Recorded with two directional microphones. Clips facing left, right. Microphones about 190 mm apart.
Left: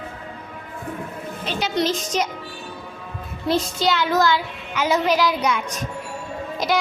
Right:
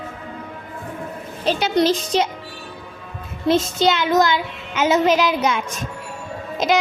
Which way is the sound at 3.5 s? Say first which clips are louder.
Right 4 dB; 20° right (ahead or behind).